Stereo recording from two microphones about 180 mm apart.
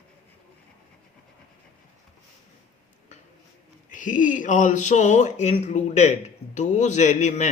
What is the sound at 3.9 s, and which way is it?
Speech, 45° left (ahead or behind).